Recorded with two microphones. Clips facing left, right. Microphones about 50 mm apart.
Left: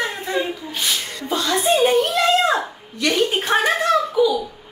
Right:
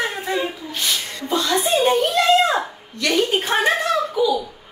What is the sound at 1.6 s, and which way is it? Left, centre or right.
Speech, centre.